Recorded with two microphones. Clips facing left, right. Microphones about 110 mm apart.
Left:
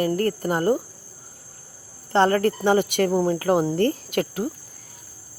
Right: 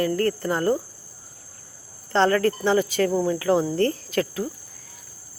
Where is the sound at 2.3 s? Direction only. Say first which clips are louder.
Even; 25° left (ahead or behind).